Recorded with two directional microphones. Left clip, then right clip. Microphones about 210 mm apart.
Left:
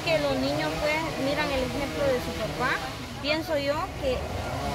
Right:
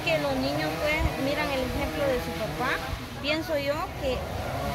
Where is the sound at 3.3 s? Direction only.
5° right (ahead or behind).